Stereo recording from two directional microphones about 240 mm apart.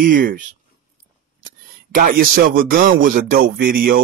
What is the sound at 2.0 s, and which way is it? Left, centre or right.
Speech, right.